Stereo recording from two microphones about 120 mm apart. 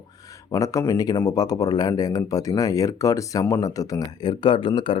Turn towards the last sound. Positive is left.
turn(degrees=45)  # may be behind; listen again after turning